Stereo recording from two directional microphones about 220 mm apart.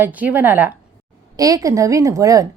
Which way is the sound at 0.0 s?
5° right (ahead or behind).